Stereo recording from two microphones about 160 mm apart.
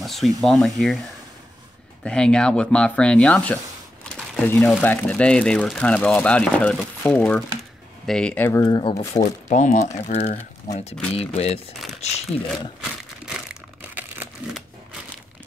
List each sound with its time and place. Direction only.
0.0 s speech: centre (ahead or behind)
2.0 s speech: 5° left (ahead or behind); by 8.9 s 25° left (ahead or behind)
9.2 s speech: 50° left (ahead or behind)
13.9 s crumpling: 10° right (ahead or behind)